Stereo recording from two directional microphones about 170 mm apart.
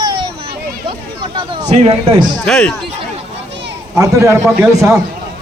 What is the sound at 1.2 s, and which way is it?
Speech, 35° right (ahead or behind).